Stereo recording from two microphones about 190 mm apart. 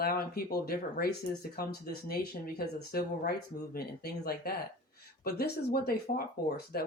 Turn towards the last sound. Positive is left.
turn(degrees=55)  # may be behind; listen again after turning